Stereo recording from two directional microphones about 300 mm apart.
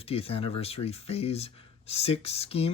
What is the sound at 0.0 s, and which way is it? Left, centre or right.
Speech, centre.